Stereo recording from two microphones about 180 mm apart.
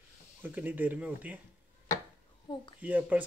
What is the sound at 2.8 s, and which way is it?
Speech, 10° right (ahead or behind).